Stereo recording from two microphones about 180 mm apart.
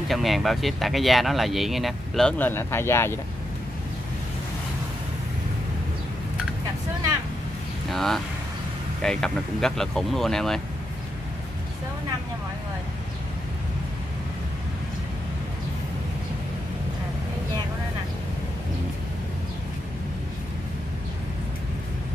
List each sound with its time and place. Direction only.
0.1 s speech: centre (ahead or behind)
7.9 s speech: centre (ahead or behind)